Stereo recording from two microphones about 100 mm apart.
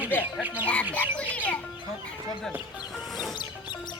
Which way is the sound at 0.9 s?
15° left (ahead or behind).